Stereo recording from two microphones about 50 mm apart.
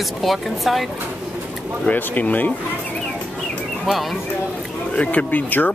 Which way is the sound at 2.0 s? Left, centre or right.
Left.